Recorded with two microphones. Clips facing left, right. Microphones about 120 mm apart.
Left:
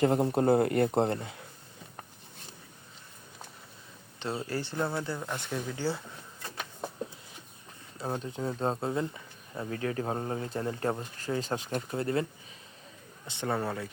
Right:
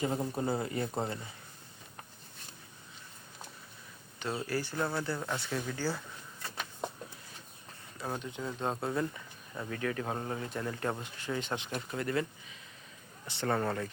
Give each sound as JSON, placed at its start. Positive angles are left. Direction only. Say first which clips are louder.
{"t": 0.0, "sound": "speech", "louder": "left 8 dB", "side_deg": 65}
{"t": 4.4, "sound": "speech", "louder": "left 1 dB", "side_deg": 25}
{"t": 5.2, "sound": "speech", "louder": "left 1 dB", "side_deg": 5}
{"t": 5.7, "sound": "speech", "louder": "left 4 dB", "side_deg": 25}
{"t": 7.9, "sound": "speech", "louder": "left 4 dB", "side_deg": 25}
{"t": 13.2, "sound": "speech", "louder": "even", "side_deg": 15}